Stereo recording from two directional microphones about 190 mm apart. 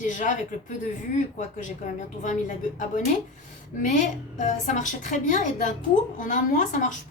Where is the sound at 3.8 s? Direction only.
40° left (ahead or behind).